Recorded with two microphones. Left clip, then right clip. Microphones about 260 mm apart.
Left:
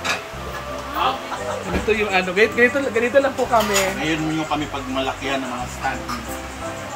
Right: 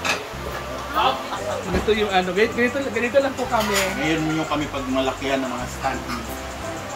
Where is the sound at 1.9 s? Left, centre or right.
Centre.